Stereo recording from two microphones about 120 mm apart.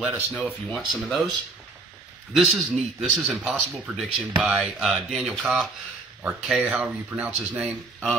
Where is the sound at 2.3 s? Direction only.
5° right (ahead or behind).